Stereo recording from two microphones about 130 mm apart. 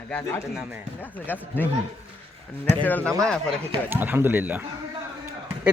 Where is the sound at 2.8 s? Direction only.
15° left (ahead or behind).